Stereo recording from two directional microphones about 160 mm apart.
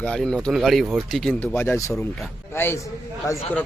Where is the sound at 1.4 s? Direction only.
15° left (ahead or behind).